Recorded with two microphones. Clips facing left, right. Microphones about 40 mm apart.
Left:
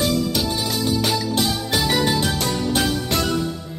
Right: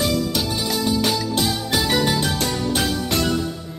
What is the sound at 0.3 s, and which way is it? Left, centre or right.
Music, centre.